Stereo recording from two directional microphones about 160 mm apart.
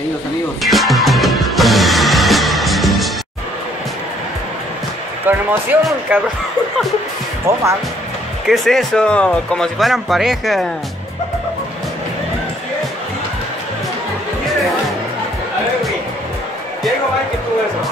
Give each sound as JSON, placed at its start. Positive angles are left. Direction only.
{"t": 0.6, "sound": "music", "side_deg": 0}
{"t": 5.2, "sound": "speech", "side_deg": -10}
{"t": 7.5, "sound": "speech", "side_deg": -15}
{"t": 8.5, "sound": "speech", "side_deg": 0}